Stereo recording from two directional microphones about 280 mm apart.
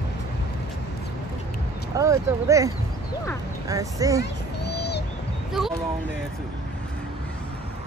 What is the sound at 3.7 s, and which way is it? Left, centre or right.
Speech, centre.